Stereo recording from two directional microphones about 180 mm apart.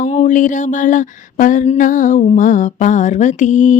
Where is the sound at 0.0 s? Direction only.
40° left (ahead or behind).